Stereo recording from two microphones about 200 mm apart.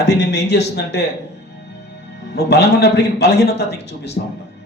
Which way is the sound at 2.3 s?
55° left (ahead or behind).